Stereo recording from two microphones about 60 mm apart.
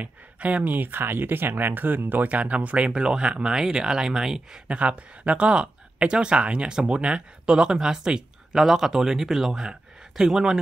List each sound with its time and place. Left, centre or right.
0.0 s speech: right
2.2 s speech: right
4.7 s speech: right